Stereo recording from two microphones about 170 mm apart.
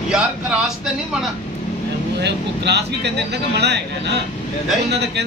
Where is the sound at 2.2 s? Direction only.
80° right.